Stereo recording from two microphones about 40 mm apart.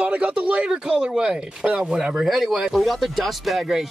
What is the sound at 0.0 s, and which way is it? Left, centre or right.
Speech, right.